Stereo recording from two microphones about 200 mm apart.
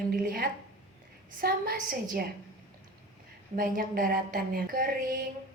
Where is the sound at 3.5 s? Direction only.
45° right (ahead or behind).